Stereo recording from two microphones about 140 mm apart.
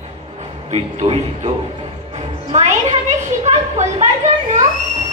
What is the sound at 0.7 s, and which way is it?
A woman's voice, 50° right (ahead or behind).